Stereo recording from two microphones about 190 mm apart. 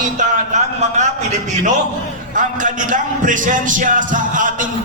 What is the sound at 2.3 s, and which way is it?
Speech, 45° right (ahead or behind).